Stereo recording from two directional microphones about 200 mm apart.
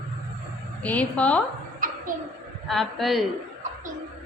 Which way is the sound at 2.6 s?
Centre (ahead or behind).